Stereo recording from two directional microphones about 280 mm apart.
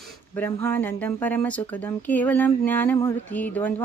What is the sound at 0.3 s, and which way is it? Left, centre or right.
Speech, centre.